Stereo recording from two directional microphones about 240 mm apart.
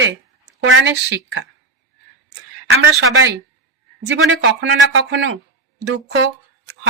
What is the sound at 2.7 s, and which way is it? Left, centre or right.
Speech, right.